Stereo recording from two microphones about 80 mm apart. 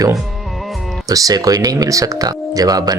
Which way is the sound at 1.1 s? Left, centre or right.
Right.